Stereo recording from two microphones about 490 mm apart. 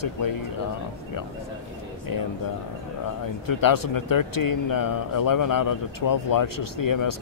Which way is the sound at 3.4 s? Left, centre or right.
Left.